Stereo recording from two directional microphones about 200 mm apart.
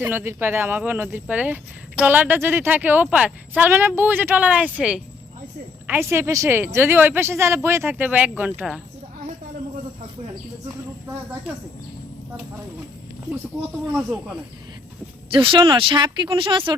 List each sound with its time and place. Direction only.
0.0 s speech: 10° right (ahead or behind)
13.9 s speech: 5° right (ahead or behind)
15.3 s speech: 25° right (ahead or behind)